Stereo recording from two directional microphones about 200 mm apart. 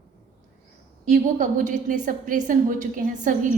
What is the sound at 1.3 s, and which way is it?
A woman's voice, 40° right (ahead or behind).